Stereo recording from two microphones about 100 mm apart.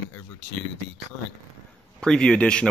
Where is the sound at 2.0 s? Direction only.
10° left (ahead or behind).